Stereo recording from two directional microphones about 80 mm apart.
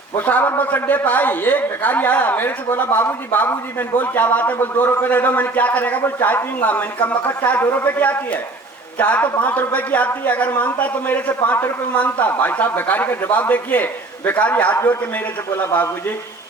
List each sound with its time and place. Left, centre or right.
0.2 s a man's voice: left